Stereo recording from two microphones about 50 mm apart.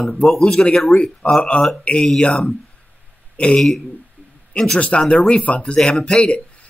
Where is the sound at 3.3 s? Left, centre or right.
Left.